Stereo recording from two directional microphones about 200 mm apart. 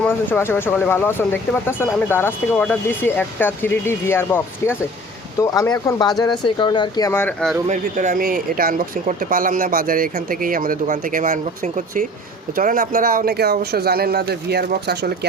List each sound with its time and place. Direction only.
0.0 s speech: 10° left (ahead or behind)
7.7 s speech: 40° right (ahead or behind)